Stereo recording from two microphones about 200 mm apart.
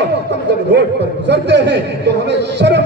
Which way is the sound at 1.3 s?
60° right (ahead or behind).